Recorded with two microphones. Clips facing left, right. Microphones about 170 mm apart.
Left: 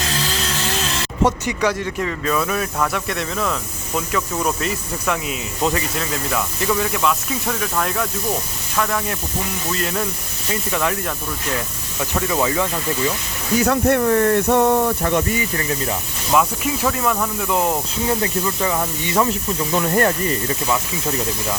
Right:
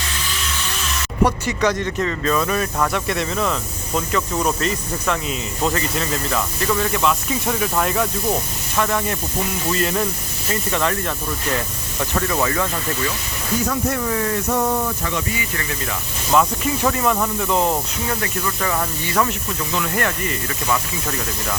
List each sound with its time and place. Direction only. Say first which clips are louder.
1.5 s speech: right 1 dB; 10° left (ahead or behind)
13.6 s speech: left 6 dB; 65° left (ahead or behind)
15.5 s speech: left 4 dB; 30° left (ahead or behind)
16.3 s speech: right 1 dB; 5° left (ahead or behind)
18.1 s speech: left 4 dB; 20° left (ahead or behind)
19.7 s speech: left 5 dB; 35° left (ahead or behind)